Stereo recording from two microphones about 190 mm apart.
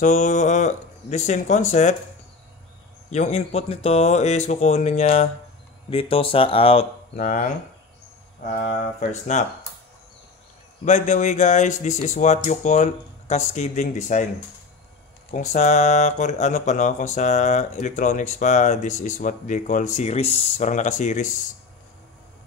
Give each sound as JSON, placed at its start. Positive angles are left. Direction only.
{"t": 0.0, "sound": "speech", "side_deg": 40}
{"t": 3.1, "sound": "speech", "side_deg": 35}
{"t": 7.2, "sound": "speech", "side_deg": 40}
{"t": 9.3, "sound": "speech", "side_deg": 35}
{"t": 10.9, "sound": "speech", "side_deg": 40}
{"t": 15.3, "sound": "speech", "side_deg": 40}